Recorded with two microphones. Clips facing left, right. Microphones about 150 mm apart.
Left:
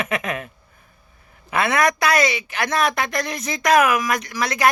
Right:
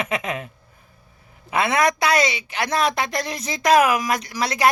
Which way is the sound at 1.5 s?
25° right (ahead or behind).